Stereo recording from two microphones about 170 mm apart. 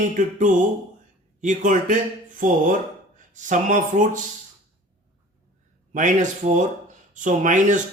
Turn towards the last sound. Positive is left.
turn(degrees=-45)  # may be behind; listen again after turning